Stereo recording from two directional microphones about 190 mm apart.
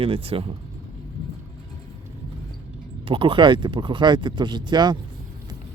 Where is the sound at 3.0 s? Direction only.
25° right (ahead or behind).